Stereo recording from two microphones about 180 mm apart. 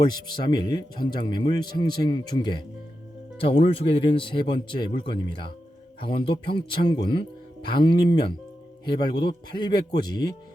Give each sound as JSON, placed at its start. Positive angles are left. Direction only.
{"t": 0.5, "sound": "speech", "side_deg": 25}